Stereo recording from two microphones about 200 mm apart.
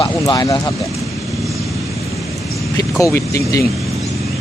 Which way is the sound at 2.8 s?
15° left (ahead or behind).